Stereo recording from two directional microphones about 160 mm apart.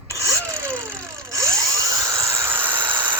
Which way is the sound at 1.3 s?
20° right (ahead or behind).